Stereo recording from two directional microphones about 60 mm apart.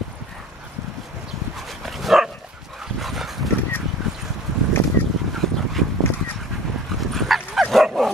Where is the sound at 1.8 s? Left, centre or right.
Centre.